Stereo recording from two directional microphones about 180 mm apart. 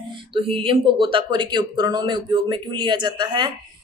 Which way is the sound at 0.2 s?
30° right (ahead or behind).